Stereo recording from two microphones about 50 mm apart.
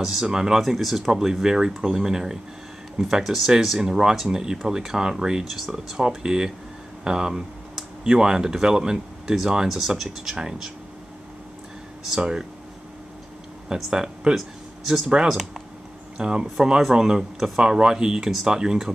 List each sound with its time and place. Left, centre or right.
0.0 s speech: centre
12.1 s speech: centre
13.7 s speech: centre